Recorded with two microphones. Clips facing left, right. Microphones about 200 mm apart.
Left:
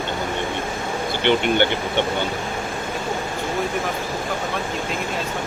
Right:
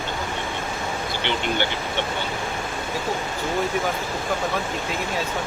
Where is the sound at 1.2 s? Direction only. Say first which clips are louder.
Left 10 dB; 55° left (ahead or behind).